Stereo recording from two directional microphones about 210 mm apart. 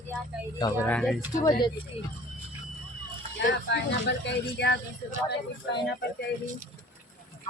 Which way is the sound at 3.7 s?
55° left (ahead or behind).